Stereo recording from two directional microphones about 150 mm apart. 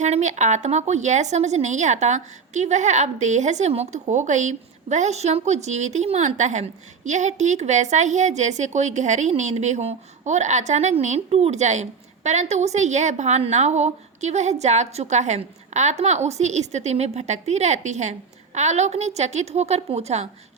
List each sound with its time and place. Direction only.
0.0 s speech: 50° right (ahead or behind)